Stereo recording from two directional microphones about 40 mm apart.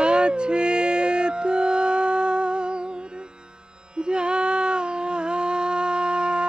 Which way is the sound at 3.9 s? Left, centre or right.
Right.